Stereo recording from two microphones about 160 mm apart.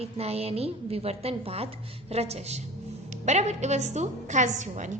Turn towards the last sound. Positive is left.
turn(degrees=-50)  # may be behind; listen again after turning